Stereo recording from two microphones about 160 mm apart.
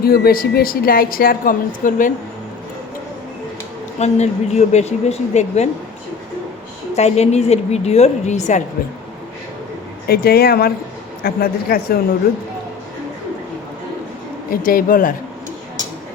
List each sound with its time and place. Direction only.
0.0 s a woman's voice: 75° left (ahead or behind); by 2.1 s 55° left (ahead or behind)
3.9 s a woman's voice: 45° left (ahead or behind)
6.9 s a woman's voice: 45° left (ahead or behind)
10.1 s speech: 70° left (ahead or behind)
14.5 s a woman's voice: 60° left (ahead or behind)